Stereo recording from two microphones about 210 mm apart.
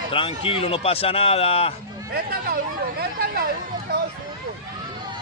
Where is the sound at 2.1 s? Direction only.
45° right (ahead or behind).